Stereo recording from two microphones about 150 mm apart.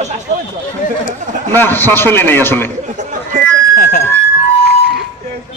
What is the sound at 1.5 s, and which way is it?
A woman's voice, 15° left (ahead or behind).